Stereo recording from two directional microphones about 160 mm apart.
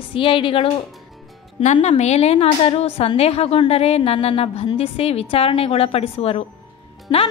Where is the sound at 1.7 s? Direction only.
45° left (ahead or behind).